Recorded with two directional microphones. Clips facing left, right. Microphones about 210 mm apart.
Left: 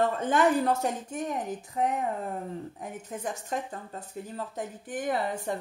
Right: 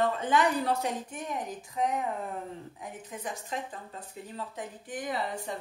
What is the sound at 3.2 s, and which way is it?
Speech, 45° left (ahead or behind).